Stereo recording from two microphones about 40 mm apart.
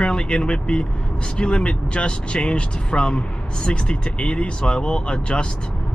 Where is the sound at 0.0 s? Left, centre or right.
Left.